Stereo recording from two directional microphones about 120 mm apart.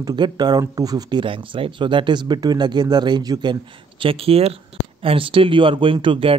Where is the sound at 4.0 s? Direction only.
50° right (ahead or behind).